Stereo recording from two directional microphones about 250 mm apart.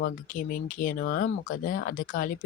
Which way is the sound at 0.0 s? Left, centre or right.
Left.